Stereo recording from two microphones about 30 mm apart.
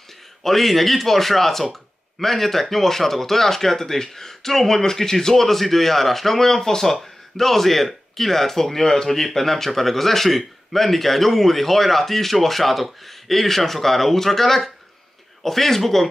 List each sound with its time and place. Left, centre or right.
0.4 s speech: centre